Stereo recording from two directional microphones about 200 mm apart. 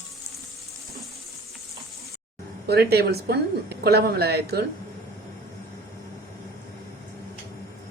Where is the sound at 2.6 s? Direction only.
55° right (ahead or behind).